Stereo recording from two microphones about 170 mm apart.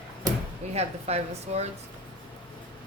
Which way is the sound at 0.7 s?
40° right (ahead or behind).